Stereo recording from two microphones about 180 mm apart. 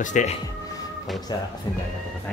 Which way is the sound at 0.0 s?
45° left (ahead or behind).